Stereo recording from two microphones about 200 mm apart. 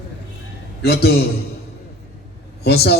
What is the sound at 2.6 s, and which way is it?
Speech, 55° left (ahead or behind).